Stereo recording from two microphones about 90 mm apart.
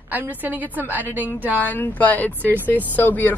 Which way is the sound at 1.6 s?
20° left (ahead or behind).